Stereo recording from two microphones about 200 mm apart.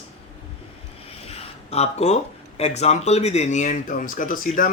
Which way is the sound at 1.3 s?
30° left (ahead or behind).